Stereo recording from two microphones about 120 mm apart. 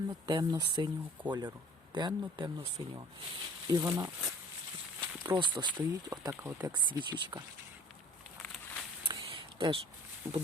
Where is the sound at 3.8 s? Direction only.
20° right (ahead or behind).